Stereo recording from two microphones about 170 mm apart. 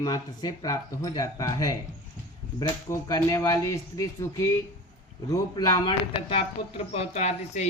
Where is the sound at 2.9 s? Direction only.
20° left (ahead or behind).